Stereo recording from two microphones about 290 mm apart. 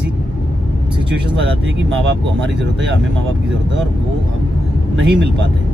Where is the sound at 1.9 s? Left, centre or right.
Right.